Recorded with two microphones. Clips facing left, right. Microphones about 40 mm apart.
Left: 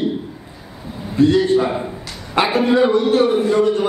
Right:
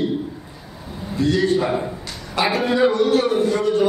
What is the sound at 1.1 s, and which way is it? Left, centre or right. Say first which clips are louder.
Speech: left 5 dB; left.